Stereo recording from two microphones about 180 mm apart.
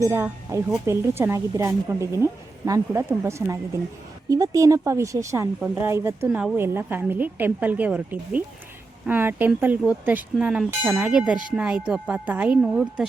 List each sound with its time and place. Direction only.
0.1 s a woman's voice: 15° right (ahead or behind)